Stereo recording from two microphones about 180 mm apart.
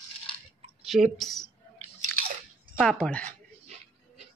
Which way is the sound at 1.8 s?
45° right (ahead or behind).